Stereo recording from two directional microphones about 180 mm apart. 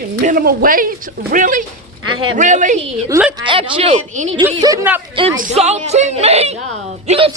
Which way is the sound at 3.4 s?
30° right (ahead or behind).